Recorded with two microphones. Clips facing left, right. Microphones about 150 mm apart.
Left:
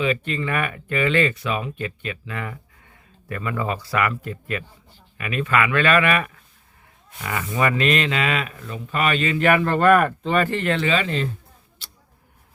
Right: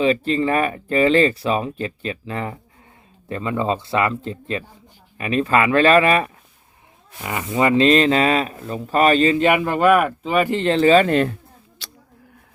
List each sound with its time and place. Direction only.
0.0 s a man's voice: 30° right (ahead or behind)
9.4 s speech: 15° right (ahead or behind)
10.6 s speech: 30° right (ahead or behind); by 11.3 s 55° right (ahead or behind)
11.8 s a sound: 90° right